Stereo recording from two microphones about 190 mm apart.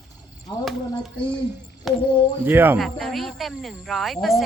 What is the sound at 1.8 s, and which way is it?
Speech, centre (ahead or behind).